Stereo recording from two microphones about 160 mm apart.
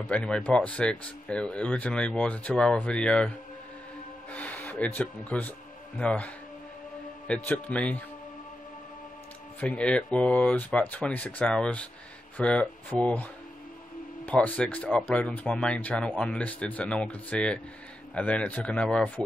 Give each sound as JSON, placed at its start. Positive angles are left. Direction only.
{"t": 0.0, "sound": "speech", "side_deg": 5}
{"t": 9.6, "sound": "speech", "side_deg": 10}